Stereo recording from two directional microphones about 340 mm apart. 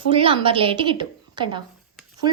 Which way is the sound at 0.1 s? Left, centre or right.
Centre.